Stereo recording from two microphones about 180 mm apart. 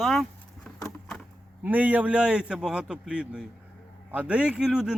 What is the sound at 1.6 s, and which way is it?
A man's voice, 10° right (ahead or behind).